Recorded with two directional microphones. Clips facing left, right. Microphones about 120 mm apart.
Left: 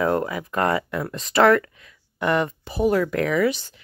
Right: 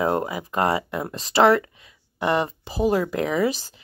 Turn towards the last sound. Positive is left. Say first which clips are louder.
# left 1 dB
turn(degrees=-35)  # may be behind; listen again after turning